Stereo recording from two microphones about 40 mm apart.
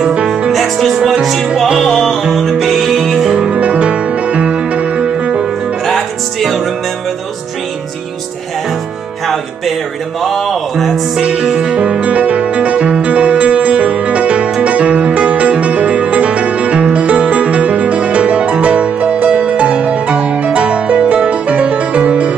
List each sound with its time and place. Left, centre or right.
0.0 s music: right
0.5 s music: centre
3.3 s music: centre
3.5 s music: right
5.9 s music: centre
10.2 s music: centre
11.2 s music: right